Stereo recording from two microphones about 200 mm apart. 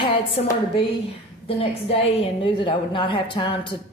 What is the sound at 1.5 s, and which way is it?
A woman's voice, 30° left (ahead or behind).